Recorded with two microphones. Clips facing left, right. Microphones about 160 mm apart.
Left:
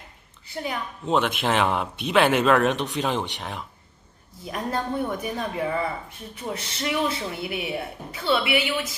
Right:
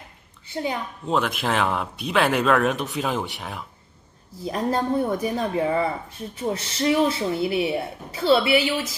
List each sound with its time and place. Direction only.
0.5 s a woman's voice: 25° right (ahead or behind)
1.0 s speech: centre (ahead or behind)
4.5 s speech: 30° right (ahead or behind)